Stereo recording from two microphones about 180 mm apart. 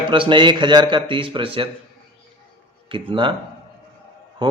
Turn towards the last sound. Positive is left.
turn(degrees=-25)  # may be behind; listen again after turning